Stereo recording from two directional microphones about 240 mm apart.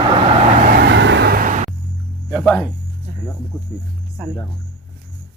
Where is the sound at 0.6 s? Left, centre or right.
Right.